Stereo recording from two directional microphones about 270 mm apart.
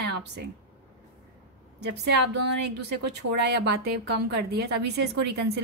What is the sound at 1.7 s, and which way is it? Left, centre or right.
A woman's voice, right.